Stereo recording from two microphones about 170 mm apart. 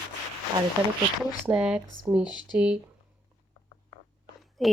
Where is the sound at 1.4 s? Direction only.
5° right (ahead or behind).